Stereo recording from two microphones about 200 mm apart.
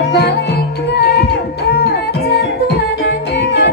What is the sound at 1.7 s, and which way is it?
Music, 55° left (ahead or behind).